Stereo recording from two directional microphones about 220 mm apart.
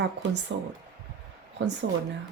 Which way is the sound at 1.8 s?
50° right (ahead or behind).